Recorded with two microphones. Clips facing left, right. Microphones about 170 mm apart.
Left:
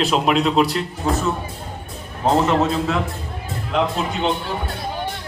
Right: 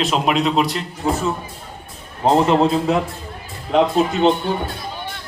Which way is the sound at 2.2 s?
30° right (ahead or behind).